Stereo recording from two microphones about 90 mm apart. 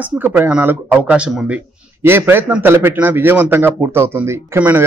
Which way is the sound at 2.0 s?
25° right (ahead or behind).